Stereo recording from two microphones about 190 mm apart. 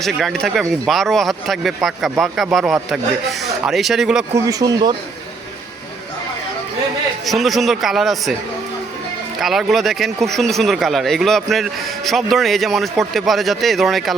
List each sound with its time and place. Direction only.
0.0 s speech: centre (ahead or behind)
4.4 s speech: 20° right (ahead or behind)
7.3 s speech: centre (ahead or behind)
9.4 s speech: centre (ahead or behind)